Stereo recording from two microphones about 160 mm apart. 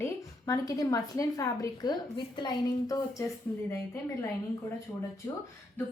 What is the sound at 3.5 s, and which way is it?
Speech, 10° left (ahead or behind).